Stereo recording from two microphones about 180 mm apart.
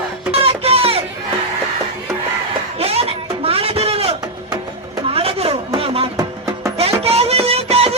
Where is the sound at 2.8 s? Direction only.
35° right (ahead or behind).